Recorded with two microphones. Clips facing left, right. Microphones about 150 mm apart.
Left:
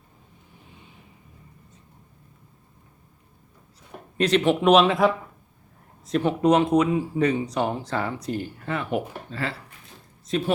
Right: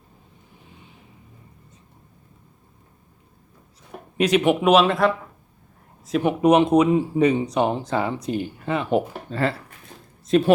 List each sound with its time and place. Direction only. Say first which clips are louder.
4.2 s speech: right 2 dB; 10° right (ahead or behind)
6.1 s speech: right 2 dB; 10° right (ahead or behind); by 9.0 s 25° right (ahead or behind)
9.3 s speech: right 8 dB; 45° right (ahead or behind)
10.2 s speech: right 8 dB; 65° right (ahead or behind)